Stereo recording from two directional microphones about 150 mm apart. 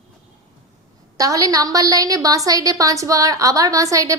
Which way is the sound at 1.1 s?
20° right (ahead or behind).